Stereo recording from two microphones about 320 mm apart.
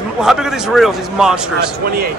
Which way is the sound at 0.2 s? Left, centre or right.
Centre.